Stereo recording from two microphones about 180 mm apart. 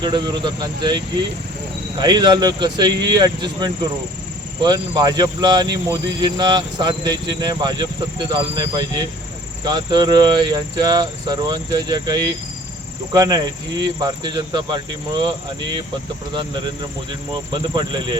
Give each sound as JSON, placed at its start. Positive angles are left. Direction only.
{"t": 0.0, "sound": "speech", "side_deg": -25}
{"t": 17.5, "sound": "speech", "side_deg": -25}